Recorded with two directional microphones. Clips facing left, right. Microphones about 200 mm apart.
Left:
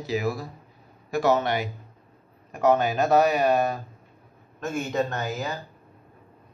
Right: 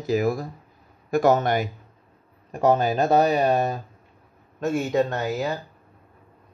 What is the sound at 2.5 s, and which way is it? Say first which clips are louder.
Speech: right 1 dB; 35° right (ahead or behind).